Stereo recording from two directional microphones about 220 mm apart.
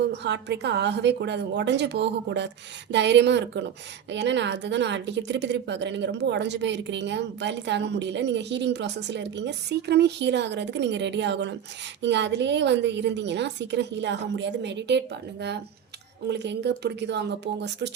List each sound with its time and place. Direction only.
0.0 s a woman's voice: 50° right (ahead or behind)